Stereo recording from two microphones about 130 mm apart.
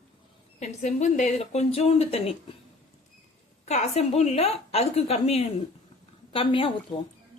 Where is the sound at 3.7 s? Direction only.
55° left (ahead or behind); by 6.7 s 40° left (ahead or behind).